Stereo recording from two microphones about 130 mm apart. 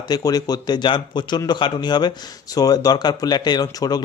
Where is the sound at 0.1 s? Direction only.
30° left (ahead or behind).